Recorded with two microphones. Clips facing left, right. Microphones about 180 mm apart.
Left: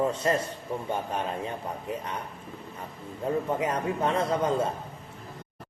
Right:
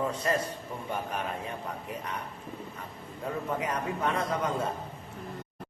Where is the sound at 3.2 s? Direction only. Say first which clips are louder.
Left 5 dB; 25° left (ahead or behind).